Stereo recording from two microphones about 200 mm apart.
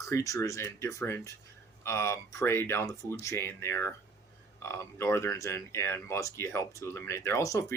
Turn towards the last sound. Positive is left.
turn(degrees=15)  # may be behind; listen again after turning